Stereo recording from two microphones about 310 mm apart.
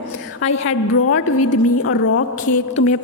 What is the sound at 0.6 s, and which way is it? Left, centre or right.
A woman's voice, left.